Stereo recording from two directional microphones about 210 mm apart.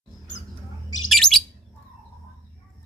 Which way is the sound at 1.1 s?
Centre (ahead or behind).